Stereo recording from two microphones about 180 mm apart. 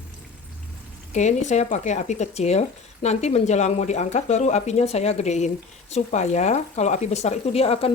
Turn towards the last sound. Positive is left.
turn(degrees=35)  # may be behind; listen again after turning